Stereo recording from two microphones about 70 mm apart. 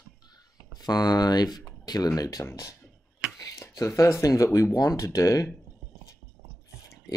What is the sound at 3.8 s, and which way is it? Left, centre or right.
Speech, left.